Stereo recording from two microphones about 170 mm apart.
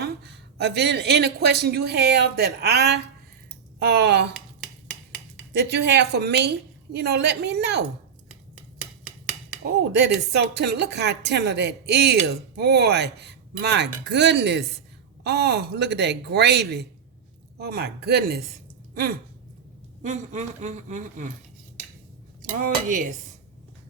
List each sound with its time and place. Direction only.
0.0 s speech: 80° right
5.5 s speech: 85° right
9.9 s speech: 80° right
18.9 s a sound: 60° right (ahead or behind)
20.0 s a woman's voice: 45° right (ahead or behind)
22.4 s speech: 55° right (ahead or behind)